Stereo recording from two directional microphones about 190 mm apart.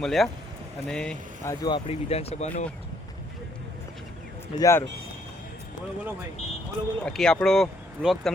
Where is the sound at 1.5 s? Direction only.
20° left (ahead or behind).